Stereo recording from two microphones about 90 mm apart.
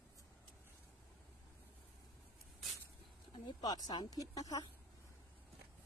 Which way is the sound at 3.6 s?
45° left (ahead or behind).